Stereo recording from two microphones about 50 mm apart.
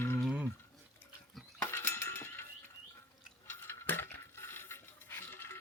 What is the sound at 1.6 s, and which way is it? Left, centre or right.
Cutlery, left.